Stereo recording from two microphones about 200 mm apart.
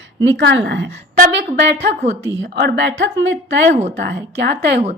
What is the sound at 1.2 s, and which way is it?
A woman's voice, 50° right (ahead or behind).